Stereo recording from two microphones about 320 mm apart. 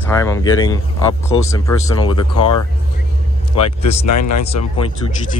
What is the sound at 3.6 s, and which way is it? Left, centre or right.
Speech, left.